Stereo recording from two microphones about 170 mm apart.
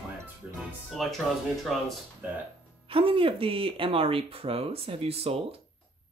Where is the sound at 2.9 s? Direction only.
30° right (ahead or behind).